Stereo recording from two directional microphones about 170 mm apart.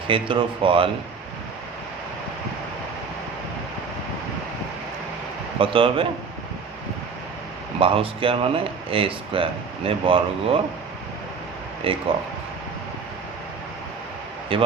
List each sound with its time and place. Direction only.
0.1 s speech: 30° right (ahead or behind)
5.5 s speech: 30° right (ahead or behind)
7.8 s speech: 30° right (ahead or behind)
11.9 s speech: 30° right (ahead or behind)
14.5 s speech: 30° right (ahead or behind)